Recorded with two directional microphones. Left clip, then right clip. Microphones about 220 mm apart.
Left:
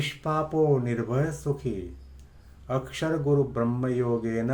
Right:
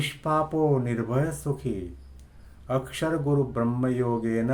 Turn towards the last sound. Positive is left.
turn(degrees=-10)  # may be behind; listen again after turning